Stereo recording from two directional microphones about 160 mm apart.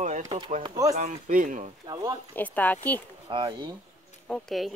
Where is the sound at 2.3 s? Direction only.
10° left (ahead or behind).